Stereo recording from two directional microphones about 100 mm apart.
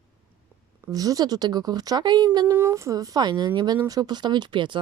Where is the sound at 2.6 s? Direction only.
25° right (ahead or behind).